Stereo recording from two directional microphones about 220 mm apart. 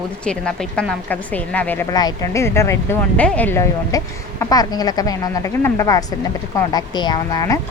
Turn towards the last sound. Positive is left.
turn(degrees=15)  # may be behind; listen again after turning